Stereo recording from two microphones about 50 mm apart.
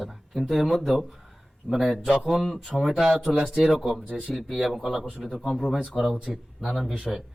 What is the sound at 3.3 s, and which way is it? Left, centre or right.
Speech, centre.